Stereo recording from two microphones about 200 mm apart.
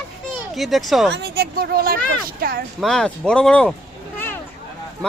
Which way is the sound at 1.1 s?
55° right (ahead or behind).